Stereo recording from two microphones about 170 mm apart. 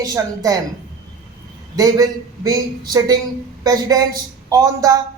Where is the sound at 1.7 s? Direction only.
20° right (ahead or behind).